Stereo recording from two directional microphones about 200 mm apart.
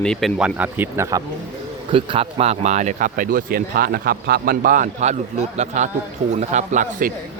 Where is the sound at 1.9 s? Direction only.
25° right (ahead or behind).